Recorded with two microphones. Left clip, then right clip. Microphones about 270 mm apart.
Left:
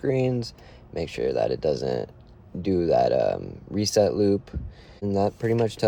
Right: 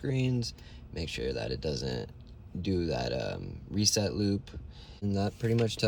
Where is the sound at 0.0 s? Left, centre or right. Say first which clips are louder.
Left 9 dB; centre.